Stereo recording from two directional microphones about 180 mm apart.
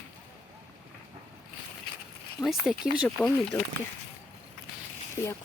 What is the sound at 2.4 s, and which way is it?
Speech, 5° right (ahead or behind).